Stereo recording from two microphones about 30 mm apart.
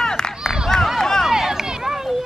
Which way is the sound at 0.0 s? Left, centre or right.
Centre.